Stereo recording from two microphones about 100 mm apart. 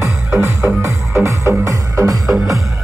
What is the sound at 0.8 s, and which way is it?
Music, 25° right (ahead or behind).